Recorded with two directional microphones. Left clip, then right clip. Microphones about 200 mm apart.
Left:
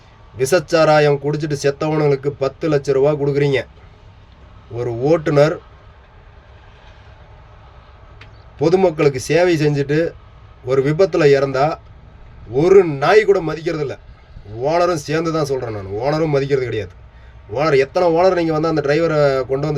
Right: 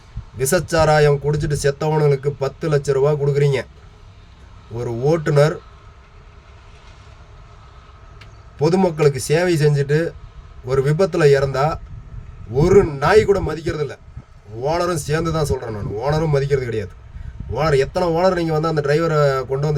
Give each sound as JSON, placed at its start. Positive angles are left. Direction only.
{"t": 0.4, "sound": "speech", "side_deg": -20}
{"t": 4.8, "sound": "speech", "side_deg": -20}
{"t": 8.5, "sound": "speech", "side_deg": -20}
{"t": 13.1, "sound": "speech", "side_deg": -20}